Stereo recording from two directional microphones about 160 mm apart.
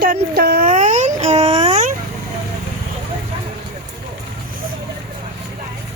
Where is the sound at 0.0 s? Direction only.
70° right (ahead or behind).